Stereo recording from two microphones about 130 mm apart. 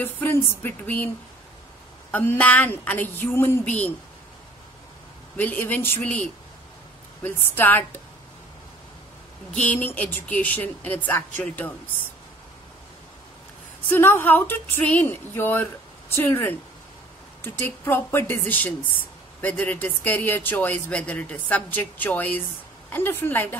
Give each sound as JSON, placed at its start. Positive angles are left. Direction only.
{"t": 0.0, "sound": "speech", "side_deg": 15}
{"t": 5.4, "sound": "speech", "side_deg": 10}
{"t": 7.2, "sound": "speech", "side_deg": 15}
{"t": 9.5, "sound": "speech", "side_deg": 10}
{"t": 13.8, "sound": "speech", "side_deg": 15}